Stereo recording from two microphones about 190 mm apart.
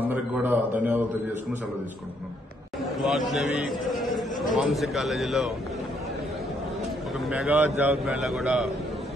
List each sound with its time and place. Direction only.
0.1 s a man's voice: 10° right (ahead or behind)
3.0 s a man's voice: centre (ahead or behind)
7.2 s a man's voice: 5° right (ahead or behind)